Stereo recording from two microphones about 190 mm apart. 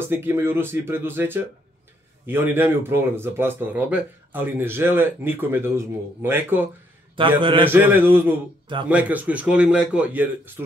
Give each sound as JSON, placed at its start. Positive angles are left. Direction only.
{"t": 0.1, "sound": "speech", "side_deg": -10}
{"t": 7.2, "sound": "a man's voice", "side_deg": -25}
{"t": 7.7, "sound": "speech", "side_deg": -10}